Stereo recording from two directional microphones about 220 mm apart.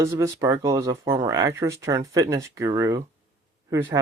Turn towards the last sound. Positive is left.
turn(degrees=-15)  # may be behind; listen again after turning